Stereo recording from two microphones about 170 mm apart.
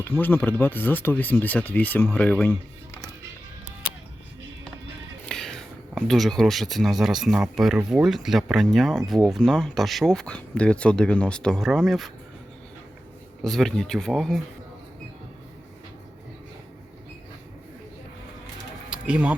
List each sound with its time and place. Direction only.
0.0 s speech: 10° left (ahead or behind)
5.3 s speech: 5° left (ahead or behind)
13.4 s speech: centre (ahead or behind)
18.9 s a sound: 5° right (ahead or behind)